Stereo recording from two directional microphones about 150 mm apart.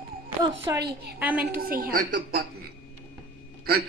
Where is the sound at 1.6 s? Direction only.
75° right (ahead or behind).